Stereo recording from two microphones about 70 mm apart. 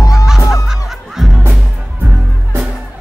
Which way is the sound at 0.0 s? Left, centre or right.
Left.